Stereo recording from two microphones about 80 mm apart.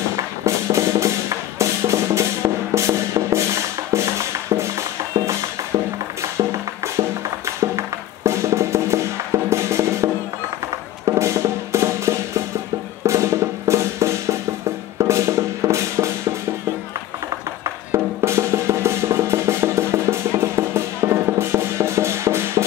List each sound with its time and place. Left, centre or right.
0.7 s music: right
6.3 s music: right
11.1 s wood block: right
13.0 s music: right
17.9 s music: right